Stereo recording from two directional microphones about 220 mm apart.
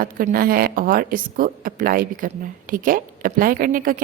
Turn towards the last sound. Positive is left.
turn(degrees=-40)  # may be behind; listen again after turning